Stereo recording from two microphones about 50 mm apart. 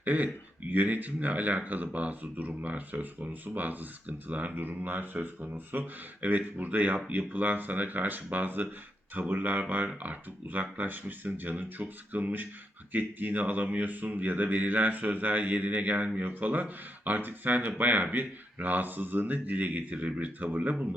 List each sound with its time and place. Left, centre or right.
0.0 s speech: right